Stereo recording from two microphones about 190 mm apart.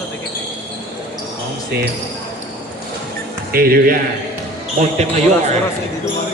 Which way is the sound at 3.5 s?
50° right (ahead or behind).